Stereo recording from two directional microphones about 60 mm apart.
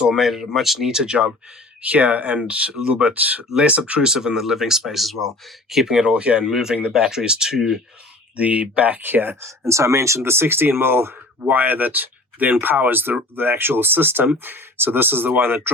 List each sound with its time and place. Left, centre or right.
0.0 s speech: centre
1.8 s speech: right
4.1 s speech: centre
5.7 s speech: centre
8.4 s speech: right
9.0 s speech: right
9.4 s speech: right